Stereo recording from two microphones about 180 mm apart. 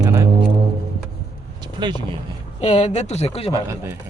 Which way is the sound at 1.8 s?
25° right (ahead or behind).